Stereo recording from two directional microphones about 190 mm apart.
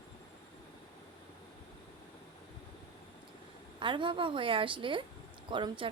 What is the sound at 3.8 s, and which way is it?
A woman's voice, 25° right (ahead or behind).